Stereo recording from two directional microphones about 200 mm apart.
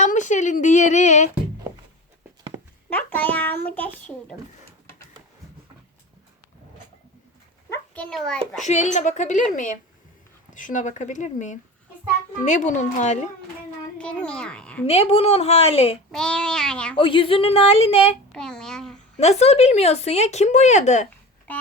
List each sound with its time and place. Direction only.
0.0 s a woman's voice: 40° left (ahead or behind)
2.9 s a child's voice: 10° left (ahead or behind)
7.7 s a sound: 5° left (ahead or behind)
8.6 s speech: 35° left (ahead or behind)
14.0 s speech: 5° left (ahead or behind)
14.8 s a woman's voice: 30° left (ahead or behind)
16.1 s speech: 5° left (ahead or behind)
17.0 s a woman's voice: 25° left (ahead or behind)
18.3 s speech: 5° left (ahead or behind)
19.2 s speech: 30° left (ahead or behind)